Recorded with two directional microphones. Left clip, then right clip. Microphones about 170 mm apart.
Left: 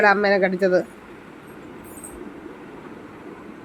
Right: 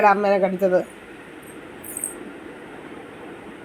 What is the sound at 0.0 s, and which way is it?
Speech, 10° left (ahead or behind).